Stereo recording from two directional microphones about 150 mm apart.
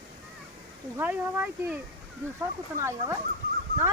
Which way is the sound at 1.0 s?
15° right (ahead or behind).